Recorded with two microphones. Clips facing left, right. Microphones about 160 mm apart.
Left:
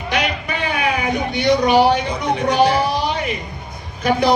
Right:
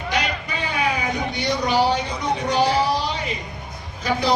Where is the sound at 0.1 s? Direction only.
65° left (ahead or behind).